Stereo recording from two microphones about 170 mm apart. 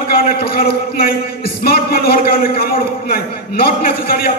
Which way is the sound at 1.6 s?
65° left (ahead or behind).